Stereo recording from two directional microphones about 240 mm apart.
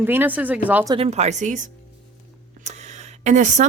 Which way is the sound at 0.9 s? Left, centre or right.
Right.